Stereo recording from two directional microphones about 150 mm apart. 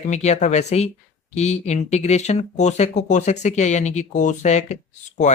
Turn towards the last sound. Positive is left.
turn(degrees=50)  # may be behind; listen again after turning